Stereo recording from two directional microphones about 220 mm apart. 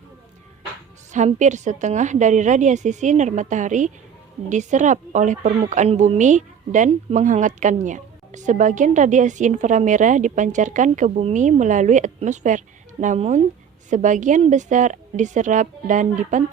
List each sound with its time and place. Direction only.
1.1 s a woman's voice: 35° right (ahead or behind)